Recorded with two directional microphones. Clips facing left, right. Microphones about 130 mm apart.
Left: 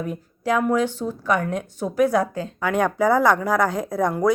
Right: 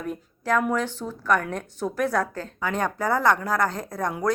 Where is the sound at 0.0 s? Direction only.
10° left (ahead or behind).